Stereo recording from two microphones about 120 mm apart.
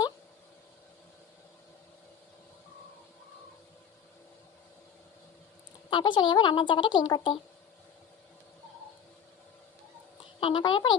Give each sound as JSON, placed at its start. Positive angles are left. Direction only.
{"t": 5.9, "sound": "a woman's voice", "side_deg": 40}
{"t": 10.4, "sound": "a woman's voice", "side_deg": 40}